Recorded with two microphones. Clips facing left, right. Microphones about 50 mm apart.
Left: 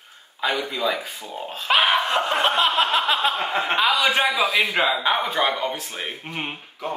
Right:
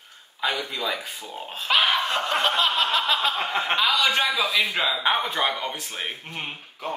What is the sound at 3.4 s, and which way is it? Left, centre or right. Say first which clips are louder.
Speech: left 2 dB; centre.